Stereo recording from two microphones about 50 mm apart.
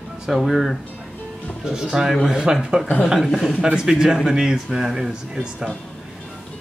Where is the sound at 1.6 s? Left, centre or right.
Centre.